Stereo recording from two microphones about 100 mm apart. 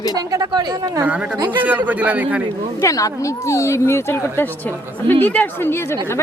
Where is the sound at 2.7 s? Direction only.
35° left (ahead or behind).